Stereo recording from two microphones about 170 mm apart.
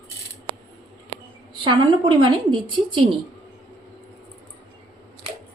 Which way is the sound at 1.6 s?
30° right (ahead or behind).